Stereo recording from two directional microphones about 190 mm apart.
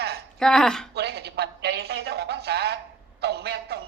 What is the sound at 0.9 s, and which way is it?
A man's voice, 60° right (ahead or behind).